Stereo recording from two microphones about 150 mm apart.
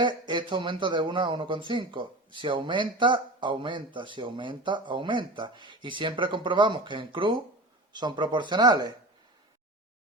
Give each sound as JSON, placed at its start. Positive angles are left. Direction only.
{"t": 0.0, "sound": "speech", "side_deg": -30}